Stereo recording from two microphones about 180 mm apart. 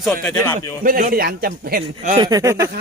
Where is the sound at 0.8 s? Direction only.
50° right (ahead or behind).